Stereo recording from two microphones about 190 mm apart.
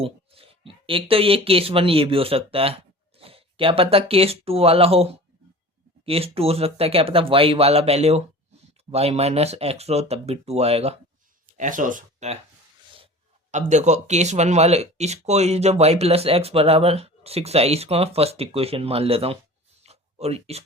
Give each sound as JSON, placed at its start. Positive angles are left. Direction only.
{"t": 0.0, "sound": "speech", "side_deg": -30}
{"t": 6.1, "sound": "speech", "side_deg": -30}
{"t": 13.5, "sound": "speech", "side_deg": -40}
{"t": 19.8, "sound": "a sound", "side_deg": -35}